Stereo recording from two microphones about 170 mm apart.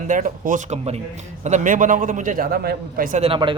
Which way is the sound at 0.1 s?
50° right (ahead or behind).